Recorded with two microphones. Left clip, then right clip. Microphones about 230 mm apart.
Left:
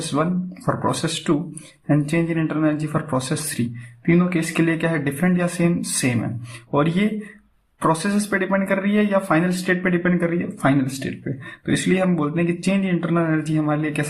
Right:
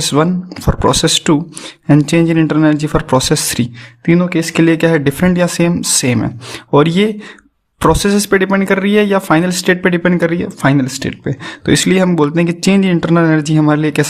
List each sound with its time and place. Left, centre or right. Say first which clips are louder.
0.1 s speech: right 5 dB; right